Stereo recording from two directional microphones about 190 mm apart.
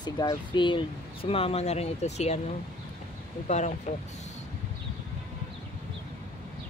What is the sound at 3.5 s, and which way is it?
Speech, 40° left (ahead or behind).